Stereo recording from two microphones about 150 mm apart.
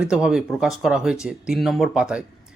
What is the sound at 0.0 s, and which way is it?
Speech, 5° right (ahead or behind).